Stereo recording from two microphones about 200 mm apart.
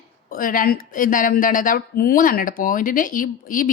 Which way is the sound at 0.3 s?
45° left (ahead or behind).